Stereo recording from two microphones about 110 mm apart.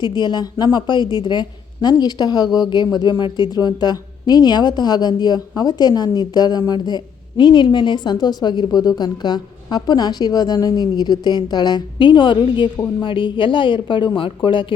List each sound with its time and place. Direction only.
0.0 s a woman's voice: 40° left (ahead or behind)